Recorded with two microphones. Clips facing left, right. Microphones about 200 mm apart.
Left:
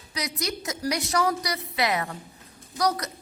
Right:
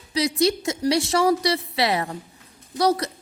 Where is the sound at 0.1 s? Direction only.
30° right (ahead or behind).